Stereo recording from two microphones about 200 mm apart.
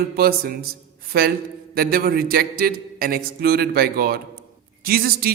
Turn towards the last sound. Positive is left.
turn(degrees=-50)  # may be behind; listen again after turning